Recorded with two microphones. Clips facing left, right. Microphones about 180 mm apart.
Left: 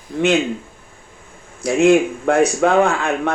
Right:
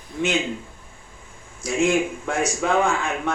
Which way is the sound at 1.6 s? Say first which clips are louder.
Left 7 dB; 60° left (ahead or behind).